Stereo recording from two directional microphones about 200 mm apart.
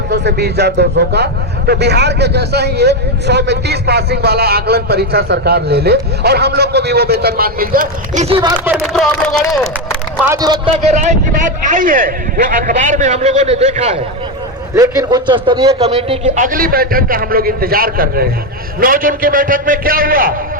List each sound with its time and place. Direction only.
0.1 s a man's voice: 55° right (ahead or behind); by 8.4 s 35° right (ahead or behind)
8.7 s speech: centre (ahead or behind)
10.2 s speech: 20° right (ahead or behind)
10.8 s a man's voice: 40° right (ahead or behind)
14.8 s a man's voice: 20° right (ahead or behind); by 20.3 s 45° right (ahead or behind)